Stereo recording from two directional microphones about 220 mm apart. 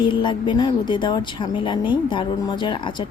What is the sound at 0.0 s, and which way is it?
Speech, 20° left (ahead or behind).